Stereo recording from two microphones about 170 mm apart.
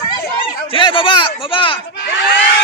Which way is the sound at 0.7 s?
30° left (ahead or behind).